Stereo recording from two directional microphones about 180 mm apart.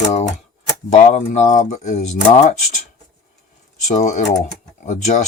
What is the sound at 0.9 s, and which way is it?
Speech, 40° left (ahead or behind).